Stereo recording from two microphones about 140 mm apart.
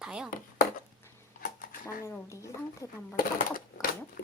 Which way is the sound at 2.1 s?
20° left (ahead or behind).